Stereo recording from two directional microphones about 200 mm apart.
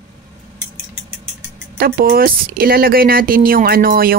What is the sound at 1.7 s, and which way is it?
Speech, 50° right (ahead or behind).